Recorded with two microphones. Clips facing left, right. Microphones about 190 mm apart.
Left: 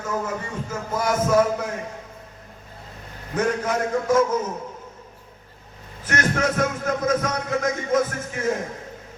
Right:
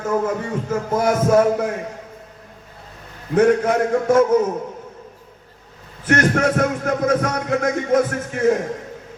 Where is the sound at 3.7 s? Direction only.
60° right (ahead or behind).